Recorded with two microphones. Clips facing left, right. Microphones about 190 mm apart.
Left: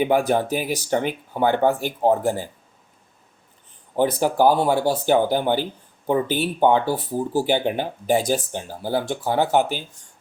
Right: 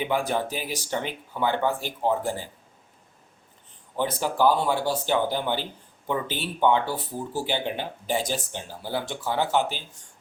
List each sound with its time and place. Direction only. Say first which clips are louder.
0.0 s speech: left 7 dB; 50° left (ahead or behind)
3.9 s speech: left 7 dB; 45° left (ahead or behind)
6.2 s speech: left 9 dB; 10° left (ahead or behind)
6.6 s speech: left 3 dB; 40° left (ahead or behind)